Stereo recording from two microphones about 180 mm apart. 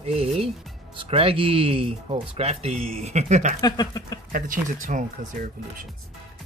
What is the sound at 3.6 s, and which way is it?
Speech, 20° left (ahead or behind).